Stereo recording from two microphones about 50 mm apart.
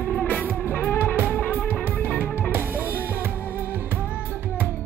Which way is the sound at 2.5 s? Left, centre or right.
Right.